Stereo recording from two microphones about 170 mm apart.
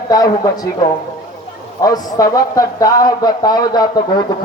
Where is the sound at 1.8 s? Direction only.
20° left (ahead or behind).